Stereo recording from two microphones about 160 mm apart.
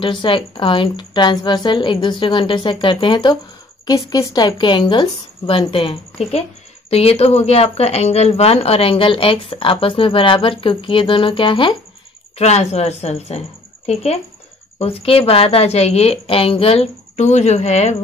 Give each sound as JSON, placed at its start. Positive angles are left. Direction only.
{"t": 0.0, "sound": "a woman's voice", "side_deg": 30}
{"t": 12.4, "sound": "a woman's voice", "side_deg": 45}
{"t": 14.8, "sound": "speech", "side_deg": 40}